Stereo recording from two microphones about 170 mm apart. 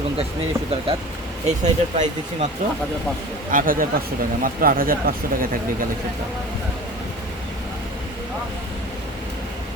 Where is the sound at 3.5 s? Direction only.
55° right (ahead or behind).